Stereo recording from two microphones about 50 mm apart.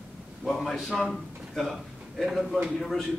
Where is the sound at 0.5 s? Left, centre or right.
Centre.